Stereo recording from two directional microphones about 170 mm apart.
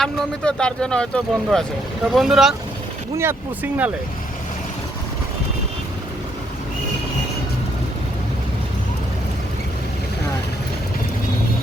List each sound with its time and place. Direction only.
0.0 s speech: 5° left (ahead or behind)